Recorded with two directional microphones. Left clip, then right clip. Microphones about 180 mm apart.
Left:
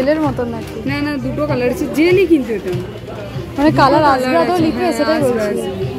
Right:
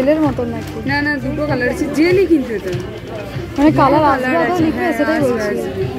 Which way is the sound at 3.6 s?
5° left (ahead or behind).